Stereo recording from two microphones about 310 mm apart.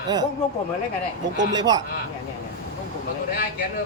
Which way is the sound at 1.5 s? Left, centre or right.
Centre.